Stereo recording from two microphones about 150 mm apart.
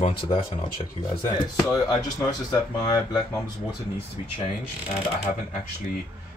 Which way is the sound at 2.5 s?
25° left (ahead or behind).